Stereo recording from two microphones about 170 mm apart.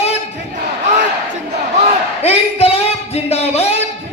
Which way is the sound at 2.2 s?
35° left (ahead or behind).